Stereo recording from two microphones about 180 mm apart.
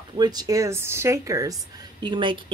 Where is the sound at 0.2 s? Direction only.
20° right (ahead or behind).